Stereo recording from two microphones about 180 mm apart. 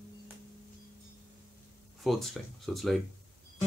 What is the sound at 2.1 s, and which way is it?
Speech, centre (ahead or behind).